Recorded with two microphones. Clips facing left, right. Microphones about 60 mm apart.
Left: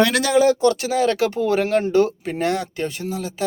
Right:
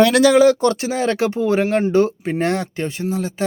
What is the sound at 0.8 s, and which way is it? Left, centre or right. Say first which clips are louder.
A man's voice: even; right.